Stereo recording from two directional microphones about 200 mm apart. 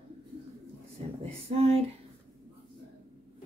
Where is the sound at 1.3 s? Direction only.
30° right (ahead or behind).